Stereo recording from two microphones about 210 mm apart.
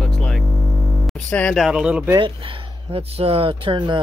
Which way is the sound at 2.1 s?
25° right (ahead or behind).